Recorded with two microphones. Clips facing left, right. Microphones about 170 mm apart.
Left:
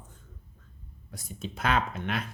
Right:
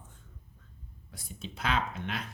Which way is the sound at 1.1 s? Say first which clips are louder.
Left 5 dB; 45° left (ahead or behind).